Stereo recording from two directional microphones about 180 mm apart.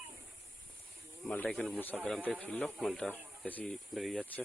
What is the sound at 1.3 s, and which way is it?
Speech, 10° left (ahead or behind).